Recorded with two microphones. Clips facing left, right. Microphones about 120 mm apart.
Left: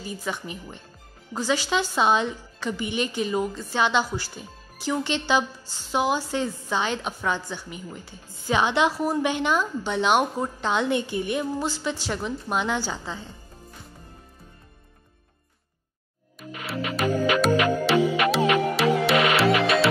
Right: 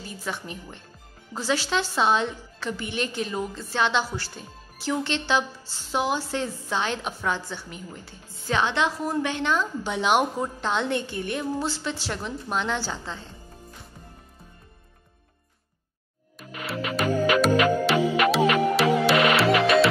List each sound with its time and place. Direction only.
0.0 s a woman's voice: centre (ahead or behind)
9.8 s a woman's voice: 5° right (ahead or behind)
16.3 s music: centre (ahead or behind)